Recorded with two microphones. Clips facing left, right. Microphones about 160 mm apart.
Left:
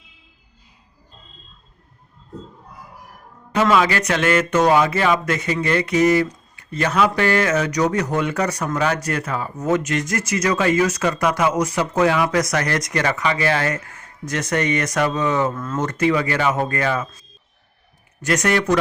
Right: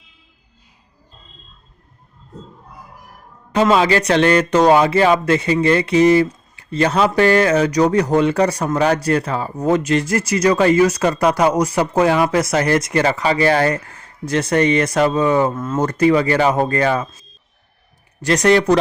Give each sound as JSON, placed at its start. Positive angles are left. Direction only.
{"t": 3.5, "sound": "a man's voice", "side_deg": -30}